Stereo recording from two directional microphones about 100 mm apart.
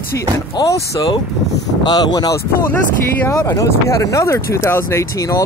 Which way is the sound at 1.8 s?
45° left (ahead or behind).